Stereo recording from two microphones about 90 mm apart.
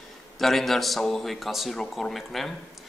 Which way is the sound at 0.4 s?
Centre (ahead or behind).